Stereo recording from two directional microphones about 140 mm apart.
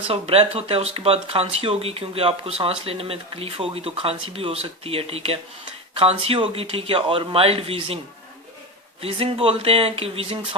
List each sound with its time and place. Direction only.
0.1 s speech: 45° right (ahead or behind)
9.0 s speech: 45° right (ahead or behind)